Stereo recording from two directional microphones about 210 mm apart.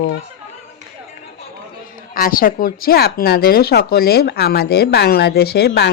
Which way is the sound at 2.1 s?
45° left (ahead or behind).